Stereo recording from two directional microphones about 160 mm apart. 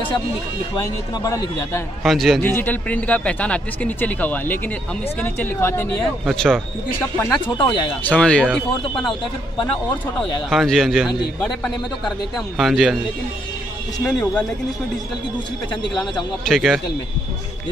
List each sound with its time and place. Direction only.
0.7 s a man's voice: 20° left (ahead or behind)
2.0 s a man's voice: centre (ahead or behind)
2.4 s speech: 10° left (ahead or behind)
6.2 s a man's voice: 5° left (ahead or behind)
7.4 s speech: 30° left (ahead or behind)
8.0 s speech: 5° left (ahead or behind)
10.5 s a man's voice: centre (ahead or behind)
12.5 s a man's voice: centre (ahead or behind)
14.0 s speech: 5° left (ahead or behind)
16.4 s a man's voice: centre (ahead or behind)